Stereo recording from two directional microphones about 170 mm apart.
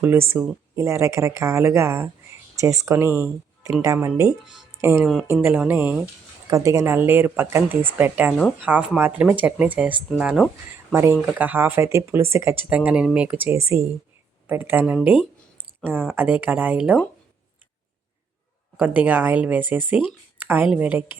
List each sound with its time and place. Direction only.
0.0 s speech: 15° right (ahead or behind)
10.9 s speech: 15° right (ahead or behind)
18.8 s speech: 10° right (ahead or behind)